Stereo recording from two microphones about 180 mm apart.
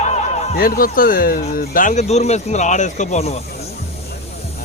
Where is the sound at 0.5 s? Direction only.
55° left (ahead or behind); by 3.4 s 35° left (ahead or behind).